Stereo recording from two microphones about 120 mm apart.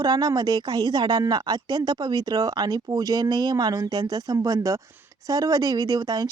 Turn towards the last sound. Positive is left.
turn(degrees=-35)  # may be behind; listen again after turning